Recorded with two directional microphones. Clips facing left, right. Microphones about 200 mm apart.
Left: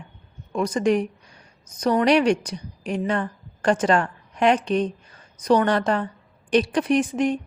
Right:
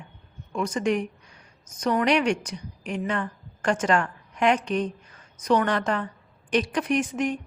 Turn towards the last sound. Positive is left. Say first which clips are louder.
# left 4 dB
turn(degrees=30)  # may be behind; listen again after turning